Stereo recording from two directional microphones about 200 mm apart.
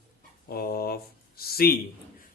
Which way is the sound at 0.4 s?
50° left (ahead or behind).